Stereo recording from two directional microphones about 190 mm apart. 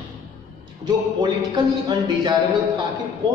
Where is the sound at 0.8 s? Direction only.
20° right (ahead or behind).